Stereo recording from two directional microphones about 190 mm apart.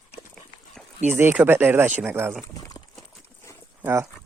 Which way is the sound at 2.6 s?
20° left (ahead or behind).